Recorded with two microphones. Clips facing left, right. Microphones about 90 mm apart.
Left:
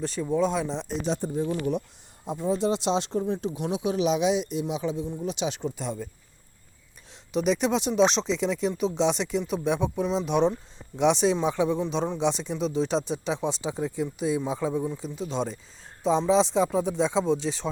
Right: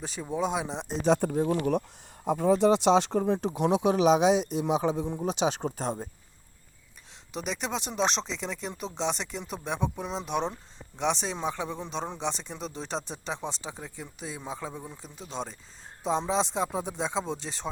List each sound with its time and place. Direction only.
0.0 s speech: 10° right (ahead or behind)
1.0 s speech: 60° right (ahead or behind); by 3.8 s 80° right
3.9 s a man's voice: 40° right (ahead or behind)
7.3 s speech: 10° left (ahead or behind)